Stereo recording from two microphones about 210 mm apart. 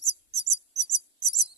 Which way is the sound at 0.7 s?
15° left (ahead or behind).